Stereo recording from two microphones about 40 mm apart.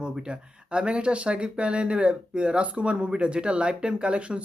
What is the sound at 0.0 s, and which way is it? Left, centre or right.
Speech, right.